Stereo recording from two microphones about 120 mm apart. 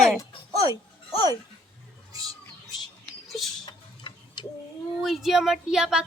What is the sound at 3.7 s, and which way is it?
Tick-tock, 40° left (ahead or behind).